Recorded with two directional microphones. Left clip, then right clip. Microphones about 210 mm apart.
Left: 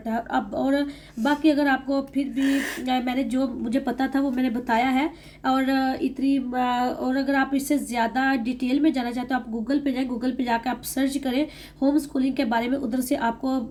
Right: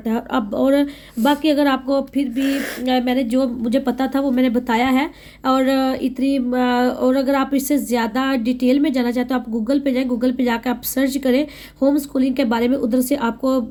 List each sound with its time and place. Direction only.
0.0 s speech: 40° right (ahead or behind)